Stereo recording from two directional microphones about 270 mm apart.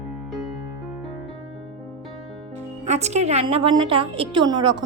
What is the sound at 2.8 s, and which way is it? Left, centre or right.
A woman's voice, right.